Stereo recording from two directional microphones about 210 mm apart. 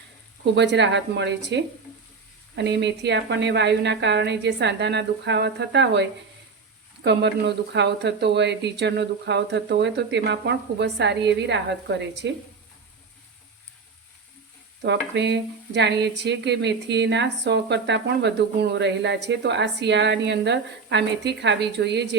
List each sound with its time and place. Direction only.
0.5 s sizzle: 55° right (ahead or behind)
14.8 s sizzle: 55° right (ahead or behind)